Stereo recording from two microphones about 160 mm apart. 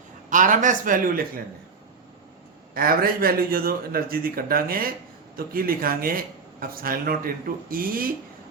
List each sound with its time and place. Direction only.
0.3 s speech: 55° right (ahead or behind)
2.7 s speech: 65° right (ahead or behind)